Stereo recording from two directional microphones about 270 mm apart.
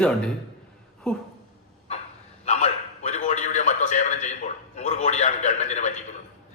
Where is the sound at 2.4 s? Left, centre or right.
Left.